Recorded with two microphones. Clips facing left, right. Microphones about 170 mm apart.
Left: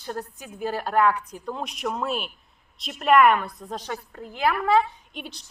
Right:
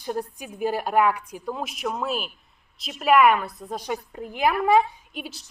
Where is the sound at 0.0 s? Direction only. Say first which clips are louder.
Right 4 dB; 15° right (ahead or behind).